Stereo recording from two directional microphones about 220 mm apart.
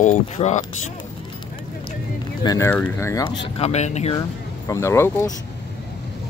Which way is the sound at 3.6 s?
30° left (ahead or behind).